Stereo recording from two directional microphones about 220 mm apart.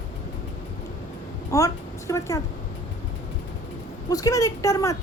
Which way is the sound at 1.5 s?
15° left (ahead or behind).